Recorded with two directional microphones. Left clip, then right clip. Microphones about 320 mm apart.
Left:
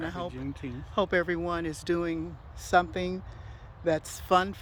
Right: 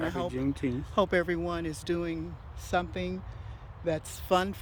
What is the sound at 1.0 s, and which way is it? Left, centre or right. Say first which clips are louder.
Speech: even; centre.